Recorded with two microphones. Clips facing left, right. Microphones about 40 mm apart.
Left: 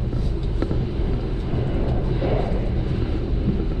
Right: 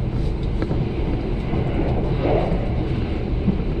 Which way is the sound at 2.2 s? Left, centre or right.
Centre.